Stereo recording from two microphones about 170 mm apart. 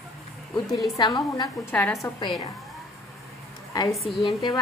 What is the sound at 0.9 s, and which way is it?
Speech, 25° left (ahead or behind).